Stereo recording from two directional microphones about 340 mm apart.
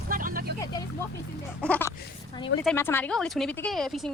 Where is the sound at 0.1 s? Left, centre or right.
Right.